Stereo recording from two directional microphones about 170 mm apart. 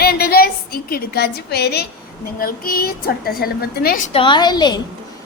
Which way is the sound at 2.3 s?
60° left (ahead or behind).